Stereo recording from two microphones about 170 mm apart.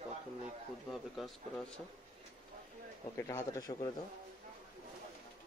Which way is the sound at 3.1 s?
15° left (ahead or behind).